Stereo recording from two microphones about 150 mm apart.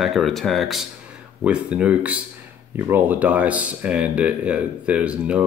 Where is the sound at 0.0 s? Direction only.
Centre (ahead or behind).